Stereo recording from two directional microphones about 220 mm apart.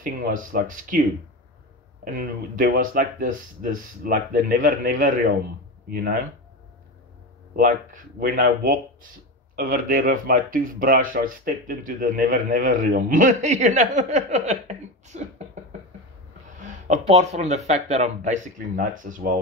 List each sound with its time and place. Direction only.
0.0 s speech: 40° right (ahead or behind)
2.1 s speech: 40° right (ahead or behind)
7.5 s speech: 40° right (ahead or behind)
16.8 s speech: 30° right (ahead or behind)